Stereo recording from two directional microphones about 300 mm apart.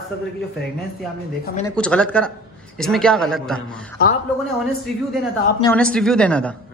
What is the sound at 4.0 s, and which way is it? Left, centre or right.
Speech, left.